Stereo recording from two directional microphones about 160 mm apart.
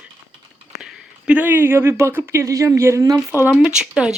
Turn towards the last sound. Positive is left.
turn(degrees=-5)  # may be behind; listen again after turning